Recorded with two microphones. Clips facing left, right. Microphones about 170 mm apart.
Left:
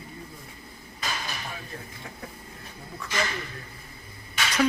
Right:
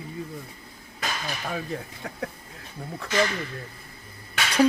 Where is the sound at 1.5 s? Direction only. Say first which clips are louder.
Right 8 dB; 70° right (ahead or behind).